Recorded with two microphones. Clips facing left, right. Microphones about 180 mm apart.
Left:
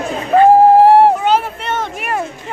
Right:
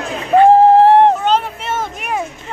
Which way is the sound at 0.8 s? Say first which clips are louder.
Left 1 dB; 10° left (ahead or behind).